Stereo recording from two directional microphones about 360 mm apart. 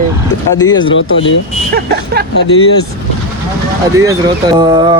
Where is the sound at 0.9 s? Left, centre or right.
Left.